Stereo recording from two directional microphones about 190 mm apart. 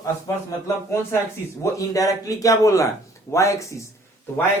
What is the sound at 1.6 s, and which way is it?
Speech, 15° left (ahead or behind).